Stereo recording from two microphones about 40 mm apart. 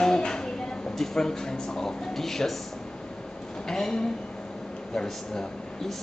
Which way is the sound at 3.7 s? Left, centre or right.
Centre.